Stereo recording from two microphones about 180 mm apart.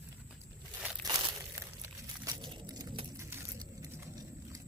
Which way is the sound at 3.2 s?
15° right (ahead or behind).